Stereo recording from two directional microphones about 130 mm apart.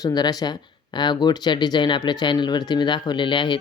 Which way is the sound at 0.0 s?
30° left (ahead or behind).